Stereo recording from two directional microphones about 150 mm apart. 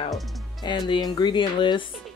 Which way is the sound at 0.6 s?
30° left (ahead or behind).